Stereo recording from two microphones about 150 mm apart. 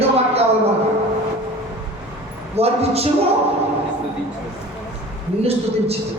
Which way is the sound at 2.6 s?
45° right (ahead or behind).